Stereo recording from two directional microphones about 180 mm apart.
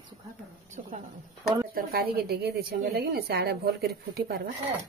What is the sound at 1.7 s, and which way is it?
A woman's voice, 60° right (ahead or behind).